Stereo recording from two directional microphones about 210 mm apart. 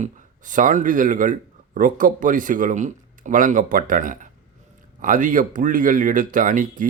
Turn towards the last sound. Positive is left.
turn(degrees=-40)  # may be behind; listen again after turning